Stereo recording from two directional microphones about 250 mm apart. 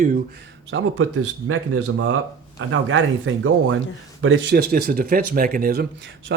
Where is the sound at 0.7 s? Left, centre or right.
Right.